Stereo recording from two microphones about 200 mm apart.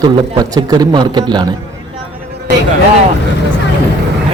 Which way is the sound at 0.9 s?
20° right (ahead or behind).